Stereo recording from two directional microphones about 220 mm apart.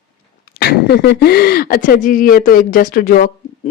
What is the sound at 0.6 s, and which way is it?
Speech, 45° left (ahead or behind).